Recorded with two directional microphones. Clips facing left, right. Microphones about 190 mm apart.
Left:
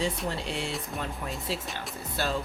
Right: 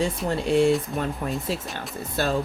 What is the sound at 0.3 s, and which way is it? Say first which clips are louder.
Speech: right 13 dB; 45° right (ahead or behind).